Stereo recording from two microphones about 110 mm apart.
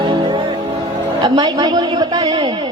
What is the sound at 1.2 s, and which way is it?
Speech, 40° right (ahead or behind).